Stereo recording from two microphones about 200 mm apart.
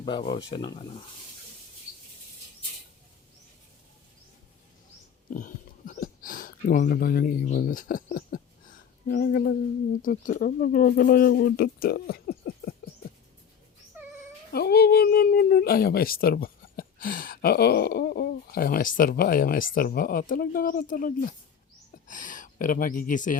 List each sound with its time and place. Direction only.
0.0 s speech: 20° left (ahead or behind)
5.3 s a sound: 40° left (ahead or behind)
9.0 s speech: 45° left (ahead or behind)
14.5 s speech: 50° left (ahead or behind)